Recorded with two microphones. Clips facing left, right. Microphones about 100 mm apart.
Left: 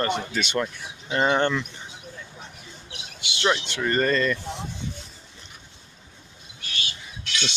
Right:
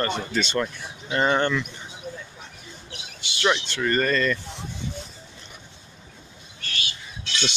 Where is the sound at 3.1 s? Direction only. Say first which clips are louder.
Left 1 dB; 15° left (ahead or behind).